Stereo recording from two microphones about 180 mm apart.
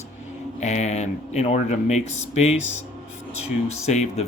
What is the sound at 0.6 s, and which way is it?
Speech, 40° left (ahead or behind).